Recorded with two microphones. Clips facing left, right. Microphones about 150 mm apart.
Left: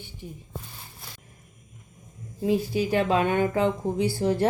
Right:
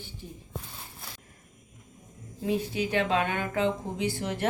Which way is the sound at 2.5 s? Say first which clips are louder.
Left 5 dB; 35° left (ahead or behind).